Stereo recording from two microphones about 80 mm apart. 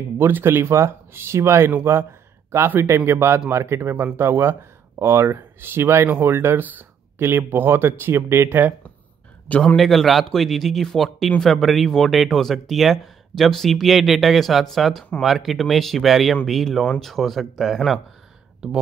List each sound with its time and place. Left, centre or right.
0.2 s speech: right
9.5 s a man's voice: centre
9.8 s speech: centre